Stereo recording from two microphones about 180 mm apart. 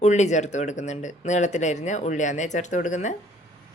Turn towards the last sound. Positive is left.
turn(degrees=45)  # may be behind; listen again after turning